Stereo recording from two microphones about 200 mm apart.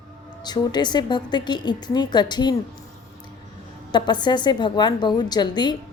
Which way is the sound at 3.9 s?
20° left (ahead or behind).